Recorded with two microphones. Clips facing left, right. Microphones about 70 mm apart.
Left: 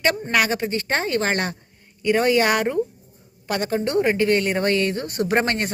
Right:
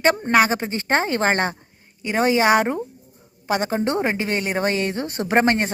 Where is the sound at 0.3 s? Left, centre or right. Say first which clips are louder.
Right 3 dB; right.